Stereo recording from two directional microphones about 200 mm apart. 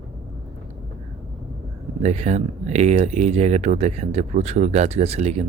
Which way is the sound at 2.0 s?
35° right (ahead or behind).